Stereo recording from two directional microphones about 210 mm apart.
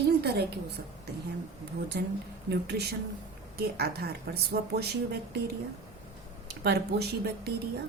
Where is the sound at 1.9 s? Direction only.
50° right (ahead or behind).